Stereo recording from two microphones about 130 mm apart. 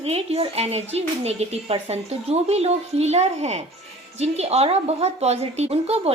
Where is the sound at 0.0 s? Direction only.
50° right (ahead or behind).